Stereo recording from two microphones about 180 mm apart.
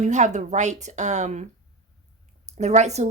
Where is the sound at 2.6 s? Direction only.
40° right (ahead or behind).